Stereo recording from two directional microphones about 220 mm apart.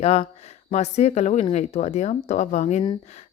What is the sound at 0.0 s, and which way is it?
Speech, 25° left (ahead or behind).